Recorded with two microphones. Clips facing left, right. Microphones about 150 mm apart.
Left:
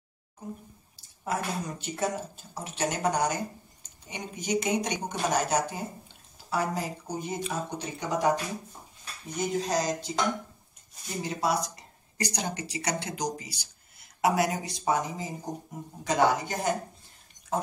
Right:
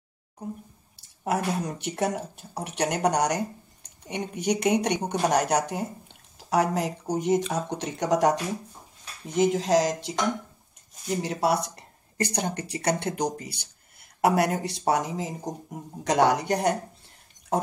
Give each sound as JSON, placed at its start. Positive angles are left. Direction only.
{"t": 1.2, "sound": "speech", "side_deg": -65}
{"t": 11.2, "sound": "speech", "side_deg": -65}